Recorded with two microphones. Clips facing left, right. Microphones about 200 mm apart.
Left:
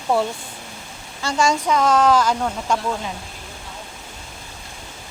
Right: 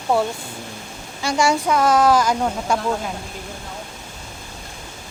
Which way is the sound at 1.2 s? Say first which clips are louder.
Right 1 dB; 10° right (ahead or behind).